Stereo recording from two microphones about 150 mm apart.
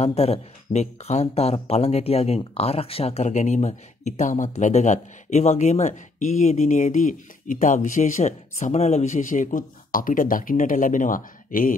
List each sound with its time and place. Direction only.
0.0 s speech: 45° left (ahead or behind); by 11.7 s 65° left (ahead or behind)